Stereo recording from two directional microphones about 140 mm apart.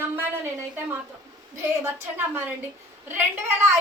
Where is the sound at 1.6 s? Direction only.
15° right (ahead or behind).